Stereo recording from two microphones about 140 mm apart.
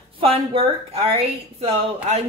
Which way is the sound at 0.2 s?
40° right (ahead or behind).